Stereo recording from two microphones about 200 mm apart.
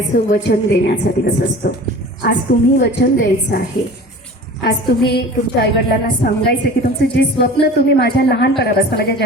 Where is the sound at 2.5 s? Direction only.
60° left (ahead or behind).